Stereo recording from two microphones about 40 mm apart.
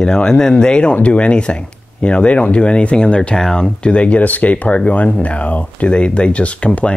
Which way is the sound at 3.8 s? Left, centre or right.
Left.